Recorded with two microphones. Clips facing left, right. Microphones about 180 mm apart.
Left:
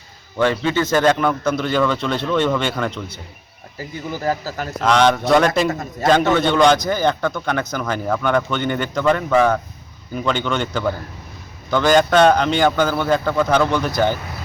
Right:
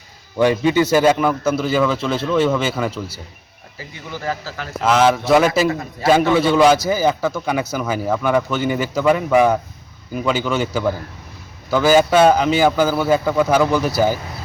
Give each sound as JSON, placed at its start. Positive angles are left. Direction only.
{"t": 0.3, "sound": "a man's voice", "side_deg": -10}
{"t": 3.8, "sound": "speech", "side_deg": 40}
{"t": 4.8, "sound": "a man's voice", "side_deg": -5}